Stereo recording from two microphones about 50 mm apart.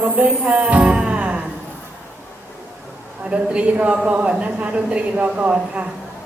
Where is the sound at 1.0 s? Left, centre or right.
Right.